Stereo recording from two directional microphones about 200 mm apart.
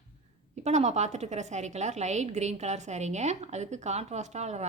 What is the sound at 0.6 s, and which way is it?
A woman's voice, 35° right (ahead or behind).